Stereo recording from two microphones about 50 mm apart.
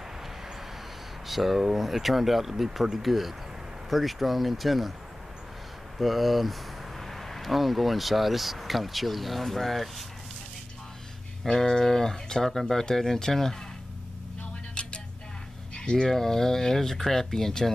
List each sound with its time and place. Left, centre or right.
1.2 s speech: centre
5.9 s speech: centre
11.4 s speech: centre
14.4 s a sound: left
15.7 s speech: centre